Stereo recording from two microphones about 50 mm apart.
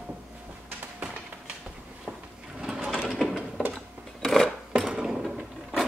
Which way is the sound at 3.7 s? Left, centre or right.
Centre.